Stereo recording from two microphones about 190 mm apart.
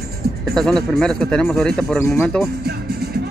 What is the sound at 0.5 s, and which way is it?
Speech, centre (ahead or behind).